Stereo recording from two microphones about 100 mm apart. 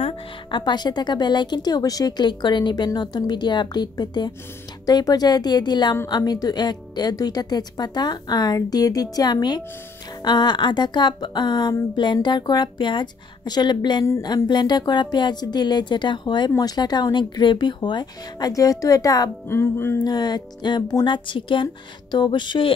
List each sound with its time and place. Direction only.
0.5 s a woman's voice: 50° left (ahead or behind)
19.4 s music: 25° left (ahead or behind)
20.0 s a woman's voice: 45° left (ahead or behind)